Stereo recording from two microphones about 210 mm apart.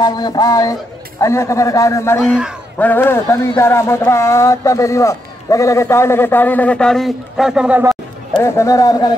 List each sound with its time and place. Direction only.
0.0 s speech: 20° left (ahead or behind)
2.2 s a man's voice: 5° right (ahead or behind)
2.8 s speech: 10° left (ahead or behind); by 8.0 s 5° right (ahead or behind)
8.4 s speech: 15° left (ahead or behind)